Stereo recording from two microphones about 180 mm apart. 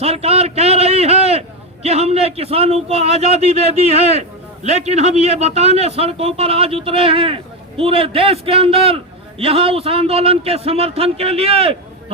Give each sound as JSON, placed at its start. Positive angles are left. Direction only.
{"t": 0.0, "sound": "a man's voice", "side_deg": -35}